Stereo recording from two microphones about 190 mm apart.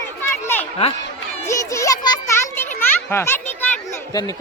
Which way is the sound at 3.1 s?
10° left (ahead or behind).